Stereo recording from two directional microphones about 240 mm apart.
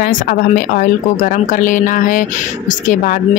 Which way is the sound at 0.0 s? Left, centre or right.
Left.